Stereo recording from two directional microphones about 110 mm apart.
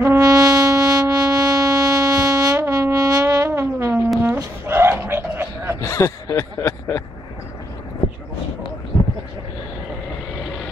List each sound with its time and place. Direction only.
0.0 s music: 30° right (ahead or behind)
4.2 s a sound: 20° right (ahead or behind)
5.8 s speech: 25° left (ahead or behind)